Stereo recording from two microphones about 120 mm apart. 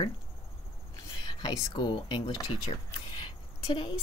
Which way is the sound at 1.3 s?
35° left (ahead or behind).